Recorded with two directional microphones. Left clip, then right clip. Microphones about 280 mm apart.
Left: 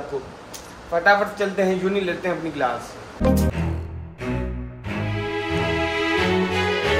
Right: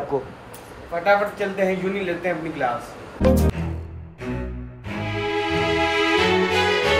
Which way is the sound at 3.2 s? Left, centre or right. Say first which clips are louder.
Right 2 dB; centre.